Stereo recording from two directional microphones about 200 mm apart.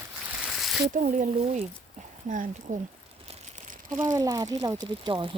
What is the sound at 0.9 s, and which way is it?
Speech, 40° right (ahead or behind).